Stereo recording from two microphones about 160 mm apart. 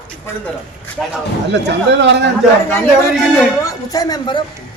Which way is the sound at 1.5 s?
90° right.